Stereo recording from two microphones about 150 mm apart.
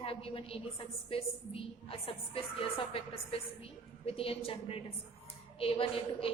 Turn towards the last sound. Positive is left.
turn(degrees=40)  # may be behind; listen again after turning